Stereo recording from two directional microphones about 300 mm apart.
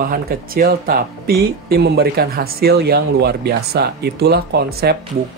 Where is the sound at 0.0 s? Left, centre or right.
Right.